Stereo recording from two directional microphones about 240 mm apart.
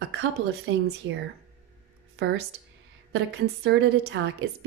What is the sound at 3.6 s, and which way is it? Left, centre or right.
Speech, right.